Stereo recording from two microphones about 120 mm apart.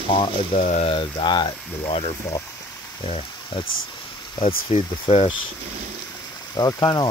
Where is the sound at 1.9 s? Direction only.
55° left (ahead or behind).